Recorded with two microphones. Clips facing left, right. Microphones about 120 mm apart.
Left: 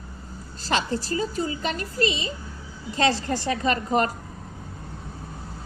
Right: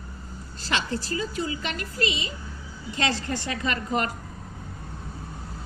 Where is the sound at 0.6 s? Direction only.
40° left (ahead or behind).